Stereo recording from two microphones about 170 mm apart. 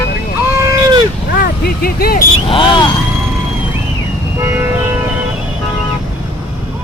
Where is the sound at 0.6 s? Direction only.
20° right (ahead or behind).